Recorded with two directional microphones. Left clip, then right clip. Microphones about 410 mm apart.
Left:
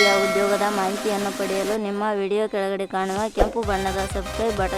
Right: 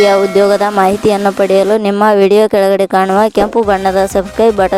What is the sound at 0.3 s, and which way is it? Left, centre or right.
Speech, right.